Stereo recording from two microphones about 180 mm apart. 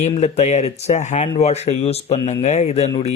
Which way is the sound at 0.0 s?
40° left (ahead or behind).